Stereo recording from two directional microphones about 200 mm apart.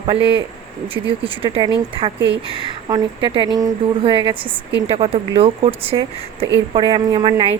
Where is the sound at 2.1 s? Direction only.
60° right (ahead or behind).